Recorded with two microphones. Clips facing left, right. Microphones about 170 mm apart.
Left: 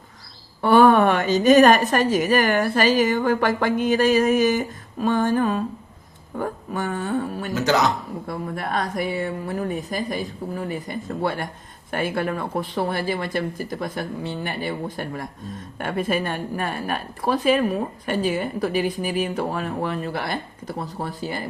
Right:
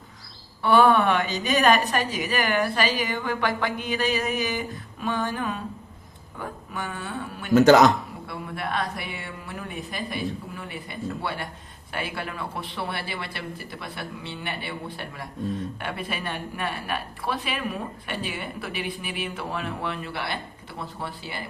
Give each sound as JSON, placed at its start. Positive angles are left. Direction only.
{"t": 0.6, "sound": "a woman's voice", "side_deg": 45}
{"t": 7.5, "sound": "a man's voice", "side_deg": -50}
{"t": 8.3, "sound": "a woman's voice", "side_deg": 40}